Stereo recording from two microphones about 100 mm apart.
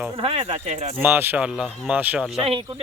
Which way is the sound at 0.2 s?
65° right (ahead or behind).